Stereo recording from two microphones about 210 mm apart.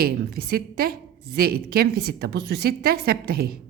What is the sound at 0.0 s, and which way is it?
A woman's voice, 45° right (ahead or behind).